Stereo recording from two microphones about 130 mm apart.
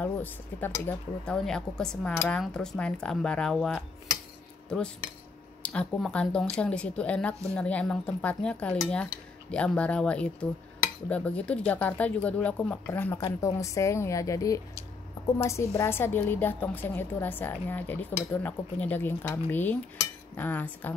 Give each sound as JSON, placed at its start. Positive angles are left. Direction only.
{"t": 0.0, "sound": "speech", "side_deg": 15}
{"t": 1.2, "sound": "a woman's voice", "side_deg": 5}